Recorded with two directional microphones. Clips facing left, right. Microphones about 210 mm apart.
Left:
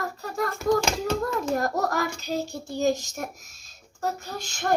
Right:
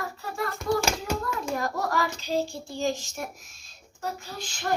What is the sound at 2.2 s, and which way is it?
Speech, 45° left (ahead or behind).